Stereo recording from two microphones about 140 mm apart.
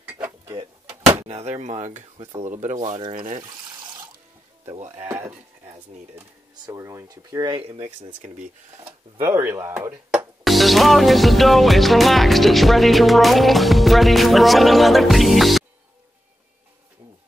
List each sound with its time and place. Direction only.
0.1 s a sound: 15° right (ahead or behind)
1.2 s speech: 50° right (ahead or behind)
3.3 s water: 35° right (ahead or behind)
4.6 s speech: 50° right (ahead or behind)
5.0 s speech: 15° right (ahead or behind)
6.5 s speech: 25° right (ahead or behind)
7.5 s speech: 40° right (ahead or behind)
9.2 s speech: 20° right (ahead or behind)
10.4 s music: centre (ahead or behind)